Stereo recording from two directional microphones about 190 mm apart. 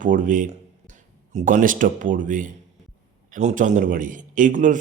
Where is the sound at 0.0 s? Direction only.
45° right (ahead or behind).